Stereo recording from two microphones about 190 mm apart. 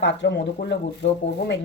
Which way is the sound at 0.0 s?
70° left (ahead or behind).